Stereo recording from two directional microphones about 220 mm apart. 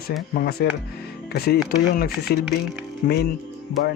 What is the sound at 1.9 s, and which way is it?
Speech, 40° left (ahead or behind).